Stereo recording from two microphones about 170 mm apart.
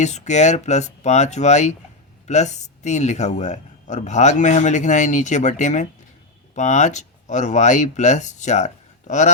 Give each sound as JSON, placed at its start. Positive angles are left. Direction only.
{"t": 0.0, "sound": "speech", "side_deg": 45}